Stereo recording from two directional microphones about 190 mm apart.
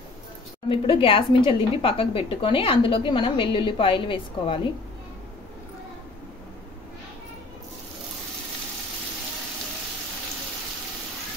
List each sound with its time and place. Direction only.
0.7 s a woman's voice: 25° left (ahead or behind)